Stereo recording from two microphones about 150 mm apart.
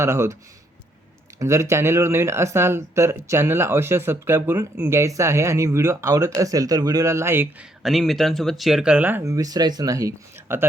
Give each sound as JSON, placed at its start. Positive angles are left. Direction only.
{"t": 0.0, "sound": "speech", "side_deg": -20}
{"t": 1.4, "sound": "speech", "side_deg": -20}
{"t": 7.8, "sound": "speech", "side_deg": 0}